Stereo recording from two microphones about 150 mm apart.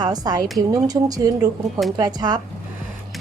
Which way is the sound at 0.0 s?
25° right (ahead or behind).